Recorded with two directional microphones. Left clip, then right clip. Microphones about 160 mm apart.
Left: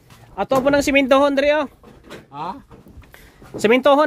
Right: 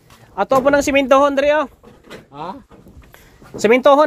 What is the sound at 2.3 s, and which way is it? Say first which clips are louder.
Vehicle: left 1 dB; 55° left (ahead or behind).